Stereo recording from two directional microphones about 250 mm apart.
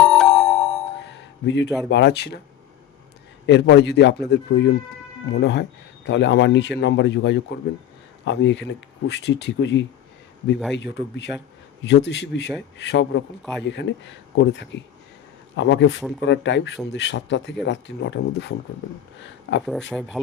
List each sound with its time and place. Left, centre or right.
0.0 s music: centre
0.9 s a sound: left
1.9 s speech: left
3.4 s speech: left
19.9 s speech: centre